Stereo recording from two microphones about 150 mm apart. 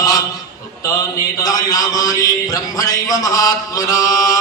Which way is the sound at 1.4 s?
25° left (ahead or behind).